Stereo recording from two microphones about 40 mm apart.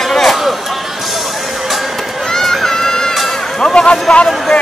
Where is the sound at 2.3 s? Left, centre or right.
Centre.